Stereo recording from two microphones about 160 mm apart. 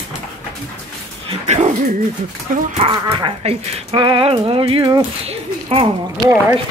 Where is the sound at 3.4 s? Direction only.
40° right (ahead or behind).